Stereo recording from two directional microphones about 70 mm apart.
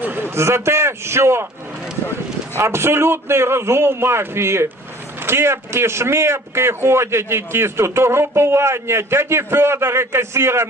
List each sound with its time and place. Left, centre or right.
0.0 s a sound: right
0.3 s a man's voice: right
2.6 s a man's voice: right